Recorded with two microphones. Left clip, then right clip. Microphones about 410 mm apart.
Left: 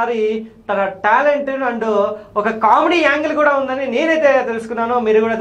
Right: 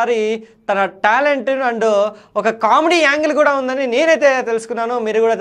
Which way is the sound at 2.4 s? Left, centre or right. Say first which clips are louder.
Left 1 dB; right.